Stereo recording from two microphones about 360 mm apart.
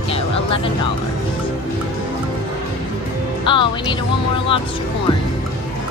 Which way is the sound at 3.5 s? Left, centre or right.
Centre.